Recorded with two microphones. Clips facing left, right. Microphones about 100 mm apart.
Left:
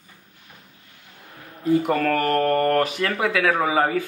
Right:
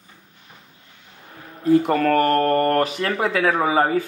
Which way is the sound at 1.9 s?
35° right (ahead or behind).